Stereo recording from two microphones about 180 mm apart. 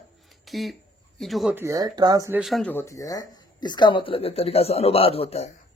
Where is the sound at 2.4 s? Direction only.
5° left (ahead or behind); by 5.5 s 35° left (ahead or behind).